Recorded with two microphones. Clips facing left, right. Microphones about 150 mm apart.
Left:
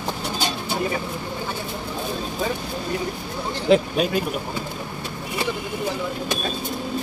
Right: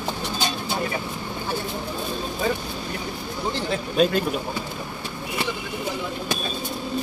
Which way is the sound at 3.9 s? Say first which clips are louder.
Right 2 dB; 5° left (ahead or behind).